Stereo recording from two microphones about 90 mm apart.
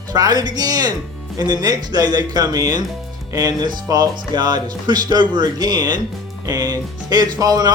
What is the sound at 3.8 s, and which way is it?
Speech, 50° right (ahead or behind).